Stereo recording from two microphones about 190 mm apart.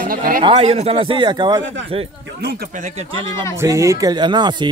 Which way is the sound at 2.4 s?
55° right (ahead or behind).